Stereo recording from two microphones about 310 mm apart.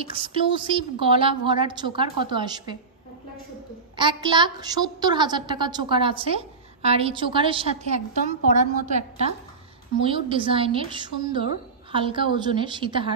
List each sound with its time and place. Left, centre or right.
0.0 s a woman's voice: centre
3.9 s a woman's voice: centre